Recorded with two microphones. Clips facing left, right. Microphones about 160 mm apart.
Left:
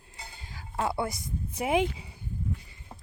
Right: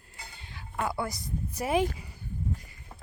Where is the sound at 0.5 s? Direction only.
30° left (ahead or behind).